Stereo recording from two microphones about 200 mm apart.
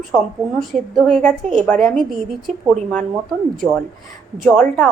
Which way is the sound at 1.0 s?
Centre (ahead or behind).